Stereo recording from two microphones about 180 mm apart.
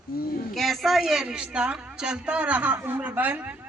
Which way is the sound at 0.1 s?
55° left (ahead or behind).